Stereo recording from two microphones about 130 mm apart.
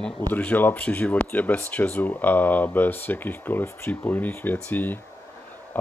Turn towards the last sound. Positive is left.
turn(degrees=15)  # may be behind; listen again after turning